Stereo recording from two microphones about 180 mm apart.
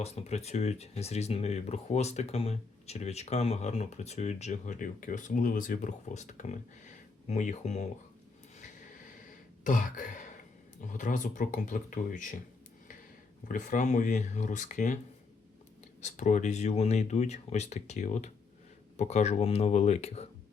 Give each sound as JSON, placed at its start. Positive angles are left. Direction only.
{"t": 0.0, "sound": "speech", "side_deg": 35}
{"t": 9.6, "sound": "speech", "side_deg": 45}
{"t": 13.5, "sound": "speech", "side_deg": 45}
{"t": 16.0, "sound": "speech", "side_deg": 40}